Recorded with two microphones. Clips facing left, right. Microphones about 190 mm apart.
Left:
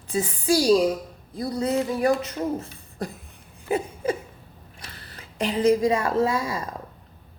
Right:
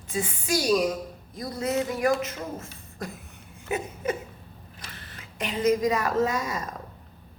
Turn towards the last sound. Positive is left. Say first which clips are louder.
# left 3 dB
turn(degrees=30)  # may be behind; listen again after turning